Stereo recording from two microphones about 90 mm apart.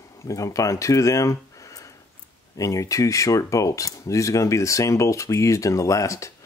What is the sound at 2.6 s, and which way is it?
Speech, 35° left (ahead or behind).